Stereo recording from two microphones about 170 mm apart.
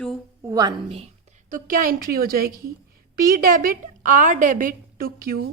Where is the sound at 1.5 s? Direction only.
55° right (ahead or behind).